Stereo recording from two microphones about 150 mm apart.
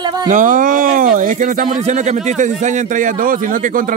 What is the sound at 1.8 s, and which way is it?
A man's voice, 50° right (ahead or behind).